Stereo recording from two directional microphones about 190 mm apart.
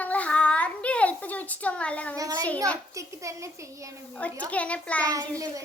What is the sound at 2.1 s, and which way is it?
A child's voice, 20° right (ahead or behind).